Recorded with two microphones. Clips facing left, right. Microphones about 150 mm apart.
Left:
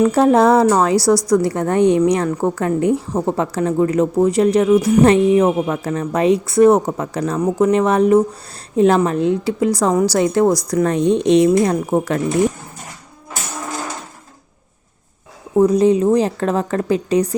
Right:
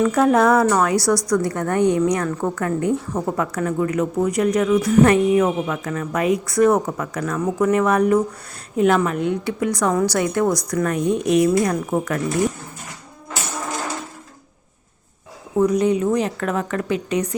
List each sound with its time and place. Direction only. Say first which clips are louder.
0.0 s speech: left 3 dB; 30° left (ahead or behind)
15.5 s a woman's voice: left 5 dB; 30° left (ahead or behind)